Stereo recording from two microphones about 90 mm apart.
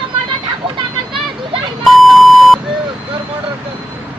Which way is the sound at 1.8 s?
Centre (ahead or behind).